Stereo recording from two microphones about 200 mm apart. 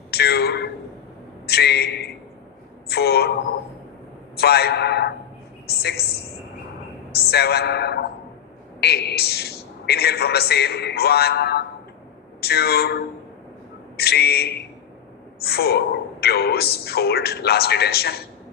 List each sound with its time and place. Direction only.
0.1 s a sound: 55° left (ahead or behind)
1.5 s a man's voice: 55° left (ahead or behind)
4.4 s a man's voice: 50° left (ahead or behind)
7.1 s a man's voice: 55° left (ahead or behind)